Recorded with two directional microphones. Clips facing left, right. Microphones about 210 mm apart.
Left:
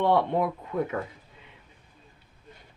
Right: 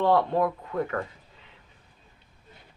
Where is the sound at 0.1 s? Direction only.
15° left (ahead or behind).